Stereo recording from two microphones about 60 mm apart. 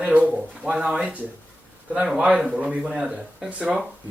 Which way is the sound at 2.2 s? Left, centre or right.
Centre.